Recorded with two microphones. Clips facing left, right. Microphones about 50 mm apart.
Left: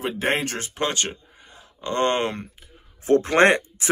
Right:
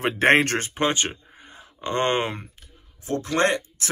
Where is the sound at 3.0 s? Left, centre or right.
Left.